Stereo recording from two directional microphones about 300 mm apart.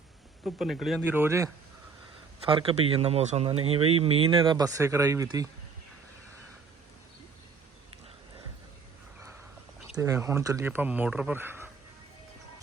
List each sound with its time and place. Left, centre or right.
0.4 s speech: centre
2.5 s speech: centre
9.9 s speech: centre